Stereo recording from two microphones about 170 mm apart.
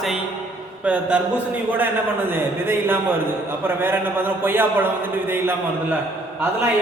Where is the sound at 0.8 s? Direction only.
10° right (ahead or behind).